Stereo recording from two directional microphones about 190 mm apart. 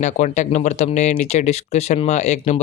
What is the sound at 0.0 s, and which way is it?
Speech, 40° left (ahead or behind).